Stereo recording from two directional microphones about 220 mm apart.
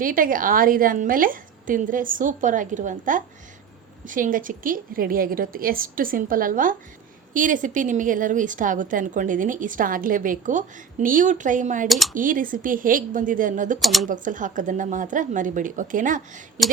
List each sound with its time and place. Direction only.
0.0 s a woman's voice: 40° right (ahead or behind)
11.9 s speech: centre (ahead or behind)
12.1 s a woman's voice: 35° right (ahead or behind)
13.7 s speech: centre (ahead or behind)
14.1 s a woman's voice: 35° right (ahead or behind)